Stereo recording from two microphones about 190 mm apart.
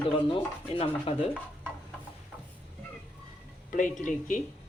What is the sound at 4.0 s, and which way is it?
Speech, 45° left (ahead or behind).